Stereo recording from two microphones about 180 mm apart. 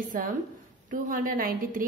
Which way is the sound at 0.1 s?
50° right (ahead or behind).